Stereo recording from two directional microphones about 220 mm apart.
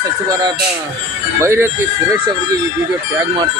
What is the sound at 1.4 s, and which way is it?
Speech, 10° right (ahead or behind).